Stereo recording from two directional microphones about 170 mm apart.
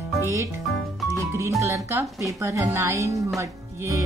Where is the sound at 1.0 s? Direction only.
15° right (ahead or behind).